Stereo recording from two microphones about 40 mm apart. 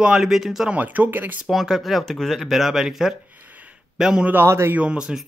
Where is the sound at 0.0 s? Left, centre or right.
Centre.